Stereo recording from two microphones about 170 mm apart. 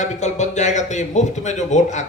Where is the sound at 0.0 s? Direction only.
45° left (ahead or behind).